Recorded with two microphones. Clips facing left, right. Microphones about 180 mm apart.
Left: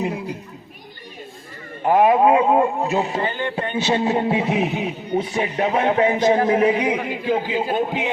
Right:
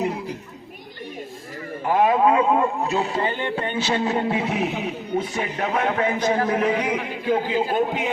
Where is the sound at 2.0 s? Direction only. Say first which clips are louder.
Left 3 dB; 20° left (ahead or behind).